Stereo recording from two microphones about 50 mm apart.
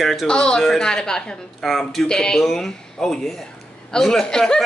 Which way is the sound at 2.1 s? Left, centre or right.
Centre.